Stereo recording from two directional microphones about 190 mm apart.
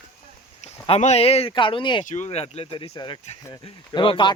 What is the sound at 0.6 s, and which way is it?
Speech, 35° left (ahead or behind).